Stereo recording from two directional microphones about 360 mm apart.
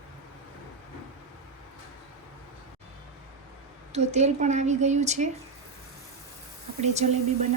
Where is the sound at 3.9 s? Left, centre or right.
Centre.